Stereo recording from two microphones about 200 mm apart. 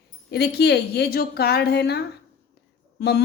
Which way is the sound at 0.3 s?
55° left (ahead or behind).